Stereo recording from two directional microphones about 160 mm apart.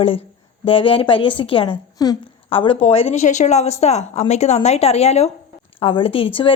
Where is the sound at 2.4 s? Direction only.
35° left (ahead or behind).